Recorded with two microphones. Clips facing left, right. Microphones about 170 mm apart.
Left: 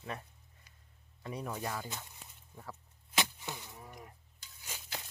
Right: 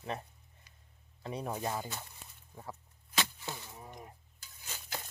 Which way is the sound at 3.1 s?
20° left (ahead or behind).